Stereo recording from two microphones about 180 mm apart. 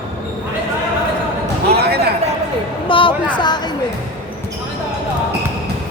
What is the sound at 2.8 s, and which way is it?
Speech, 30° left (ahead or behind).